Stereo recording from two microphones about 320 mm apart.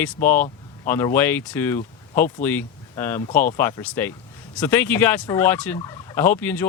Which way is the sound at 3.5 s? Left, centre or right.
Centre.